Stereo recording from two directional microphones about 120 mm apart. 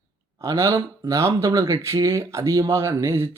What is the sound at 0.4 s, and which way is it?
Speech, 25° right (ahead or behind).